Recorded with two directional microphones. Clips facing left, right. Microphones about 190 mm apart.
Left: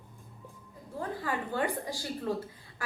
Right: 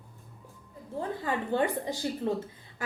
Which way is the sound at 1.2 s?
25° right (ahead or behind).